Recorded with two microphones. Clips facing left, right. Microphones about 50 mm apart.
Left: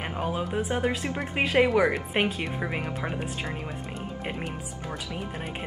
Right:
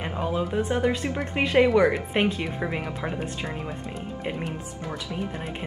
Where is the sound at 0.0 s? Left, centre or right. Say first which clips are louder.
Right 2 dB; centre.